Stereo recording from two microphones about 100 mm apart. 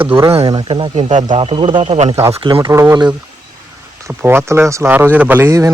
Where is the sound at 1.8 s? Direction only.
90° right.